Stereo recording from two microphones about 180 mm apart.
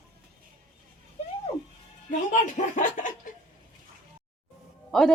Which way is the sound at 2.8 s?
45° left (ahead or behind).